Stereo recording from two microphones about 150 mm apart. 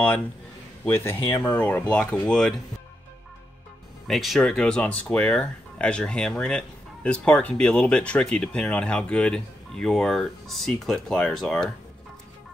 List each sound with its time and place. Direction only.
0.8 s speech: 15° left (ahead or behind)
1.2 s speech: 30° left (ahead or behind)
1.5 s speech: 10° left (ahead or behind)
4.1 s speech: centre (ahead or behind)